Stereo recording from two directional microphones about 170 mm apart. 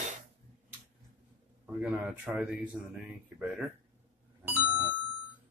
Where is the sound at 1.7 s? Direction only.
10° right (ahead or behind).